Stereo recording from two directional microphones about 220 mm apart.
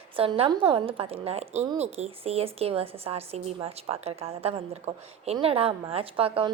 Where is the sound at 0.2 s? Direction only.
25° right (ahead or behind).